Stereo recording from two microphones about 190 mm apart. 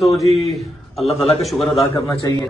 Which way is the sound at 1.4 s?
Centre (ahead or behind).